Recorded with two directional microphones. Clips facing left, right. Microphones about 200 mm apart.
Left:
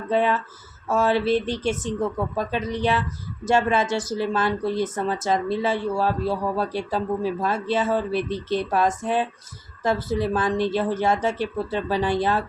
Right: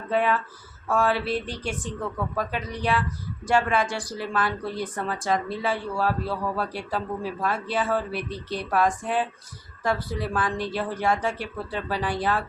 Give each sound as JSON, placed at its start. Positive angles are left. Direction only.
{"t": 0.1, "sound": "speech", "side_deg": 25}